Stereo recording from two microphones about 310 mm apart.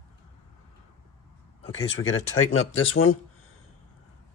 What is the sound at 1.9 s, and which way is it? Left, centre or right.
Speech, left.